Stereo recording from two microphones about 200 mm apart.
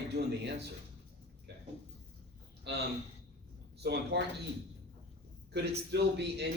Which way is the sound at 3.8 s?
55° right (ahead or behind).